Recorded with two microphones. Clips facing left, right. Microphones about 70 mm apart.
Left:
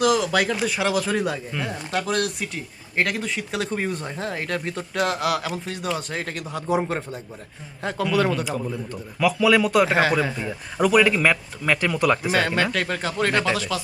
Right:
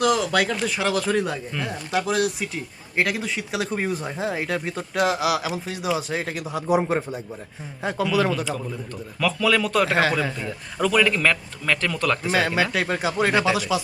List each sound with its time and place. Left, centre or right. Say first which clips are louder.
0.0 s a man's voice: left 1 dB; centre
12.3 s speech: even; centre